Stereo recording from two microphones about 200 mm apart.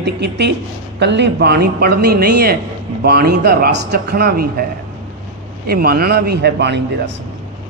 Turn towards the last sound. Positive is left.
turn(degrees=-55)  # may be behind; listen again after turning